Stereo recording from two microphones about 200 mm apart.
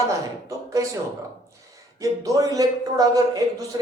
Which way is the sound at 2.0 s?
15° right (ahead or behind).